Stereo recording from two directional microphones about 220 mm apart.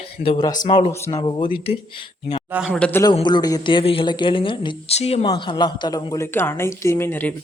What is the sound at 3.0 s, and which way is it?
Speech, 20° left (ahead or behind).